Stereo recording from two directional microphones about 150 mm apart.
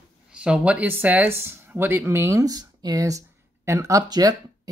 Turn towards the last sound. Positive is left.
turn(degrees=-25)  # may be behind; listen again after turning